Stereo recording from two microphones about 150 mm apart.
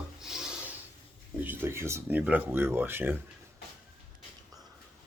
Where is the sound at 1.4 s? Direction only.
15° right (ahead or behind).